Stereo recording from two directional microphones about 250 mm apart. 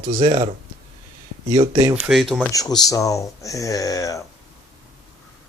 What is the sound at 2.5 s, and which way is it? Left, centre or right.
Speech, centre.